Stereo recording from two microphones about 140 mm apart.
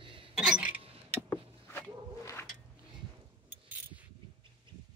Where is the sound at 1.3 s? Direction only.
15° left (ahead or behind).